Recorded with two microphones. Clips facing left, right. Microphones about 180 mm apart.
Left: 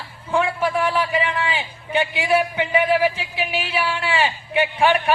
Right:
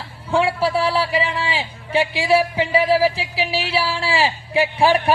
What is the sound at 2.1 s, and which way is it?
Speech, 30° right (ahead or behind).